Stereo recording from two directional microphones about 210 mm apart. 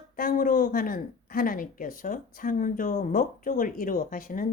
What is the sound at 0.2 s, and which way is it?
Speech, 40° left (ahead or behind).